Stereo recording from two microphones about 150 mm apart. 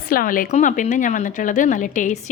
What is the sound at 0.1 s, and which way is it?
Speech, 70° left (ahead or behind).